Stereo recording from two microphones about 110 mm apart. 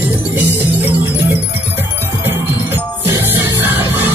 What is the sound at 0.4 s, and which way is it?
Music, 15° right (ahead or behind).